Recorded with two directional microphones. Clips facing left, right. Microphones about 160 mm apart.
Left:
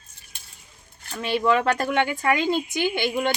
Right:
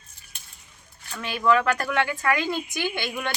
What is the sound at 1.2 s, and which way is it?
Speech, 25° left (ahead or behind).